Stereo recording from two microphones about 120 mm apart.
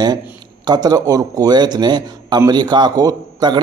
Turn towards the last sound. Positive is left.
turn(degrees=-35)  # may be behind; listen again after turning